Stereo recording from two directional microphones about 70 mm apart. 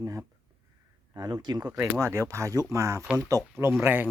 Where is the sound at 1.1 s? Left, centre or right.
Right.